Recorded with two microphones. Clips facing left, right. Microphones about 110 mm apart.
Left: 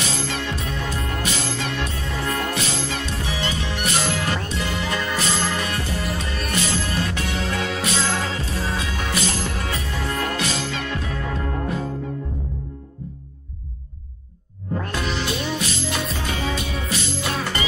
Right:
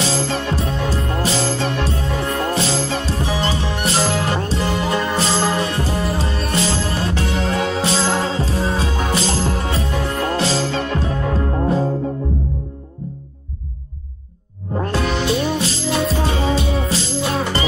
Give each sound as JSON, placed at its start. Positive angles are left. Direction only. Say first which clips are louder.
{"t": 0.0, "sound": "music", "louder": "right 6 dB", "side_deg": -30}
{"t": 14.7, "sound": "music", "louder": "right 5 dB", "side_deg": -30}